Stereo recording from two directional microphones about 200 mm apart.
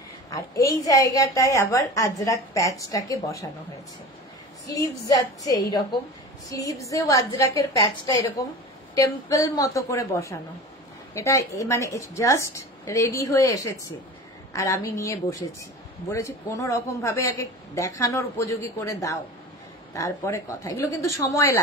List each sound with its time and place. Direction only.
0.3 s a woman's voice: 15° left (ahead or behind)
4.6 s a woman's voice: 15° left (ahead or behind)